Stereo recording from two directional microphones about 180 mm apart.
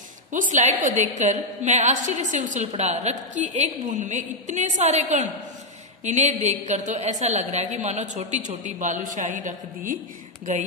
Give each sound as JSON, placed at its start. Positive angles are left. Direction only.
{"t": 0.3, "sound": "a woman's voice", "side_deg": -45}